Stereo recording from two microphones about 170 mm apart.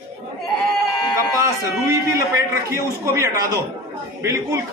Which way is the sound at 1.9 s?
15° right (ahead or behind).